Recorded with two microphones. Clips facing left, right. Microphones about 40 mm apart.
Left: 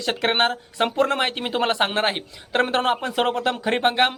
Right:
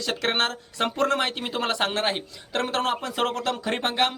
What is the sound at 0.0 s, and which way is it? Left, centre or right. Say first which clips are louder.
Speech: left 4 dB; left.